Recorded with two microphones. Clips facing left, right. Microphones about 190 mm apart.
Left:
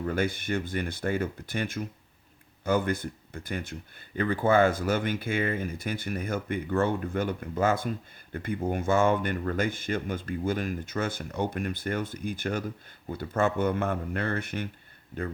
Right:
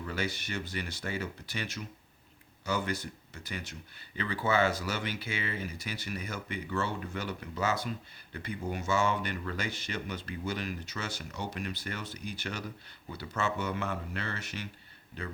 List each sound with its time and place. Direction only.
0.0 s speech: 50° left (ahead or behind)